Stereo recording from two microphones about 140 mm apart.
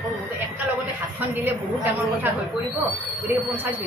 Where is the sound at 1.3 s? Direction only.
15° right (ahead or behind).